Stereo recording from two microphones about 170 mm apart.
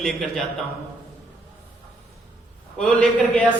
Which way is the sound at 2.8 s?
5° left (ahead or behind).